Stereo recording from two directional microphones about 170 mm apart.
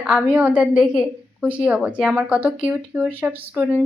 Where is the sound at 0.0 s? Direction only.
5° right (ahead or behind).